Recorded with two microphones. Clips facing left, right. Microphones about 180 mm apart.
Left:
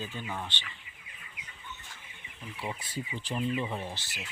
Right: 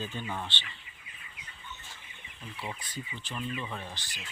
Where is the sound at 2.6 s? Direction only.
20° left (ahead or behind).